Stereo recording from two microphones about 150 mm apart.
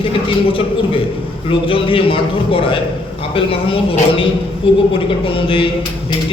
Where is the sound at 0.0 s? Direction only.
35° left (ahead or behind).